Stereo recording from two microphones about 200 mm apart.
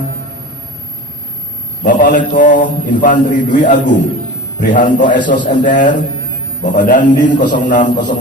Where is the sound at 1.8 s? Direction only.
40° left (ahead or behind).